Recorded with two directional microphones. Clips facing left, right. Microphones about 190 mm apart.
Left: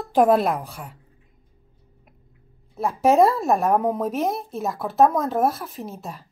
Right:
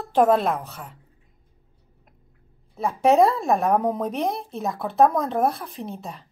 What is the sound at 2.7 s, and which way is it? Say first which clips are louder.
Speech: even; centre (ahead or behind).